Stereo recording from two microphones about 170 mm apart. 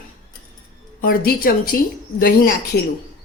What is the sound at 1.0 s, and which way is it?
A woman's voice, 60° left (ahead or behind).